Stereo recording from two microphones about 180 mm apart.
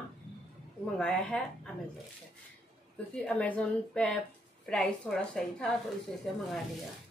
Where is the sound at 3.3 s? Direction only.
5° left (ahead or behind).